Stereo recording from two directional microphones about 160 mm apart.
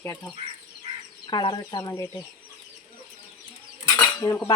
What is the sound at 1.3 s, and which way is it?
Speech, 30° left (ahead or behind).